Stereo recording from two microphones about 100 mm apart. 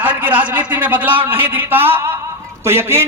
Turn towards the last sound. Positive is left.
turn(degrees=-25)  # may be behind; listen again after turning